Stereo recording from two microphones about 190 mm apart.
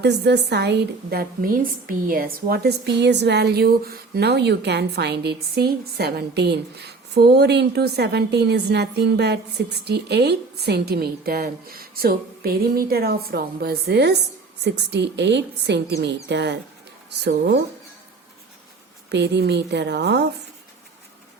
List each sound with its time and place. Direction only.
0.0 s a woman's voice: 65° right (ahead or behind)
19.1 s a woman's voice: 65° right (ahead or behind)